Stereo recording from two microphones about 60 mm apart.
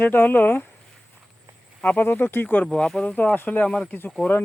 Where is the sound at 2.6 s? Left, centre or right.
Centre.